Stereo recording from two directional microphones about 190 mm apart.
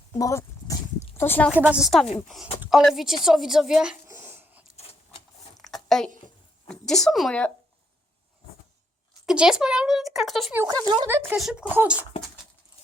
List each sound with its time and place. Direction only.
0.1 s speech: 15° left (ahead or behind)
1.5 s speech: 10° right (ahead or behind)
3.2 s a sound: centre (ahead or behind)
5.5 s a sound: centre (ahead or behind)
6.7 s speech: centre (ahead or behind)
9.2 s speech: 5° right (ahead or behind)
10.6 s speech: 20° right (ahead or behind)
11.1 s speech: 10° right (ahead or behind)